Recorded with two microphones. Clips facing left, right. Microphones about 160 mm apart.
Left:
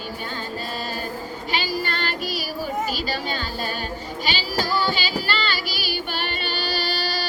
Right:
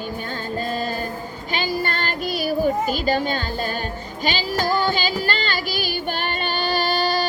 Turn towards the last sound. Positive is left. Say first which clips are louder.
# right 6 dB
turn(degrees=-50)  # may be behind; listen again after turning